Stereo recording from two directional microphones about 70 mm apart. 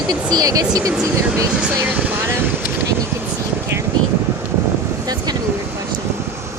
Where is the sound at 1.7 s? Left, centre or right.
Right.